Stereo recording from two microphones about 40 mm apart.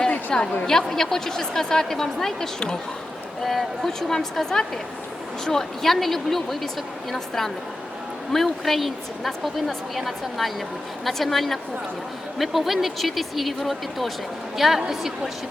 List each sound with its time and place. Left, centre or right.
0.3 s a woman's voice: centre
3.4 s a woman's voice: centre